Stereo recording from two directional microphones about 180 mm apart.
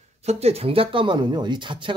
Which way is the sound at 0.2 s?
35° right (ahead or behind).